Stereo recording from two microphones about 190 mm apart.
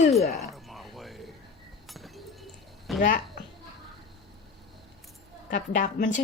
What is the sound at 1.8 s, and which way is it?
Chink, centre (ahead or behind).